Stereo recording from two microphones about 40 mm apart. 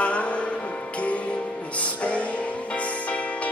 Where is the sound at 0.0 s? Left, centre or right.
Left.